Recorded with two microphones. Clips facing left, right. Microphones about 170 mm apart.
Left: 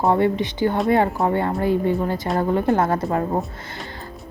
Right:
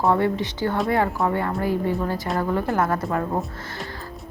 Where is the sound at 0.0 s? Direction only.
20° left (ahead or behind).